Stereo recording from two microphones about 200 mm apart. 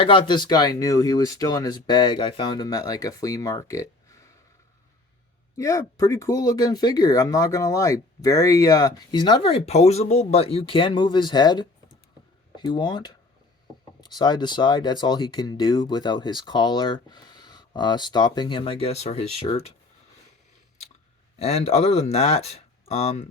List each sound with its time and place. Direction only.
0.0 s speech: 25° left (ahead or behind)
5.5 s speech: 15° left (ahead or behind)
21.3 s speech: 30° left (ahead or behind)